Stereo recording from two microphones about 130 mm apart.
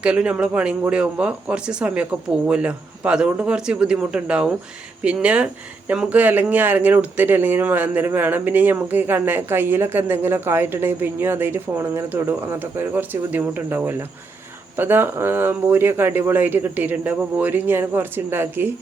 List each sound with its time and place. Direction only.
0.0 s speech: 10° right (ahead or behind)